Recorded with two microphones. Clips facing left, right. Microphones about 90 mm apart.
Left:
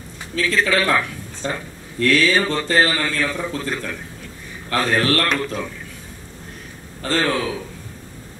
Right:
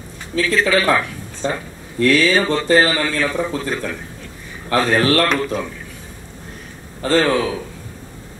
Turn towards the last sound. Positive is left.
turn(degrees=-10)  # may be behind; listen again after turning